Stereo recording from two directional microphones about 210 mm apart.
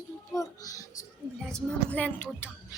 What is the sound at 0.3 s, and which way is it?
Speech, 15° left (ahead or behind).